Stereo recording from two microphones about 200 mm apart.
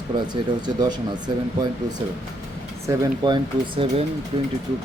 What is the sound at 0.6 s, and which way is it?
Speech, 20° right (ahead or behind).